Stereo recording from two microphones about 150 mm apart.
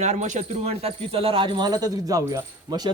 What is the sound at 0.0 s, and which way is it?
Speech, 50° right (ahead or behind).